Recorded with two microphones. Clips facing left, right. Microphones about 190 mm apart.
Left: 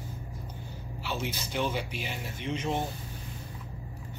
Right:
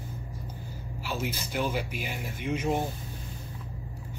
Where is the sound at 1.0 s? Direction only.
10° right (ahead or behind).